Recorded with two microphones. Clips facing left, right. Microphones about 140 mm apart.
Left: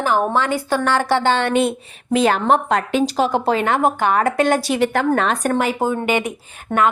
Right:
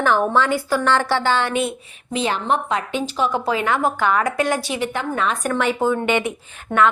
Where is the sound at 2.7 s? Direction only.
90° left.